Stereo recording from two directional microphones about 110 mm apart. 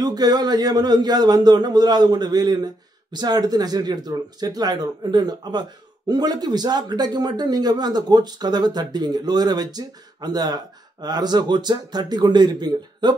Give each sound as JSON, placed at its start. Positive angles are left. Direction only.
{"t": 0.0, "sound": "speech", "side_deg": -35}